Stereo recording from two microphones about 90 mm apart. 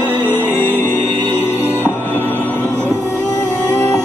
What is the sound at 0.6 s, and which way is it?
Music, 25° left (ahead or behind).